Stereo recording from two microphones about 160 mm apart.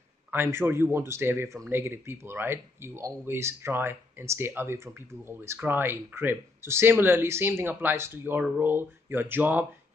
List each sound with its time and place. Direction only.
0.3 s speech: 15° right (ahead or behind)